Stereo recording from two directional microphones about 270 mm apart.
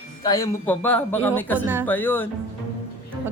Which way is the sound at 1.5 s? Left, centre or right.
Centre.